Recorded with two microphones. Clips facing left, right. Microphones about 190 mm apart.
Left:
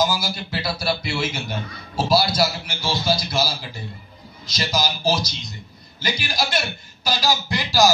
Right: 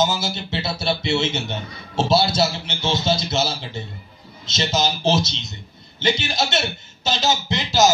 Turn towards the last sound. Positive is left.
turn(degrees=-20)  # may be behind; listen again after turning